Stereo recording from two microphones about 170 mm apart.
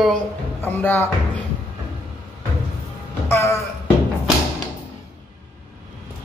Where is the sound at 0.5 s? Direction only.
15° left (ahead or behind).